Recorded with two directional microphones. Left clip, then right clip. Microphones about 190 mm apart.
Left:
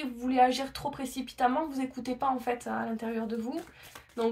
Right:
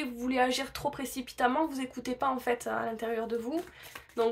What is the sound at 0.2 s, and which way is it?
Speech, 40° right (ahead or behind).